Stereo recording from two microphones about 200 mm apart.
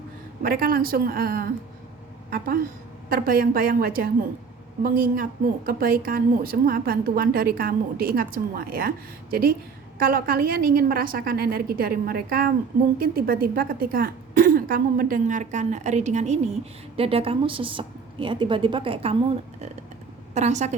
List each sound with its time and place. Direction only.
0.4 s a woman's voice: 45° right (ahead or behind)
3.1 s a woman's voice: 45° right (ahead or behind); by 19.1 s 30° right (ahead or behind)
20.3 s a woman's voice: 35° right (ahead or behind)